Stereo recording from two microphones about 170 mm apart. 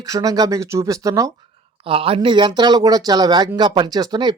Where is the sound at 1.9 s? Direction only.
30° right (ahead or behind).